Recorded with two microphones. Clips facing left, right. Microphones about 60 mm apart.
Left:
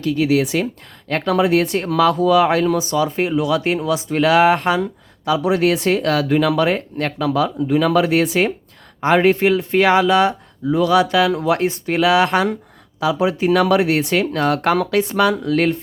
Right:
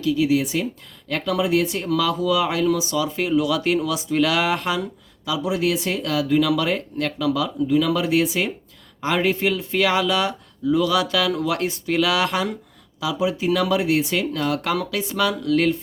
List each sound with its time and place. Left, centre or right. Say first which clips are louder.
0.0 s speech: left 3 dB; left
1.0 s speech: left 5 dB; left
6.5 s speech: left 4 dB; left
12.3 s speech: left 6 dB; left